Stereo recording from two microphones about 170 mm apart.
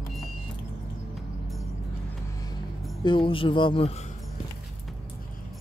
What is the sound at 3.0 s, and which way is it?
Speech, 30° left (ahead or behind).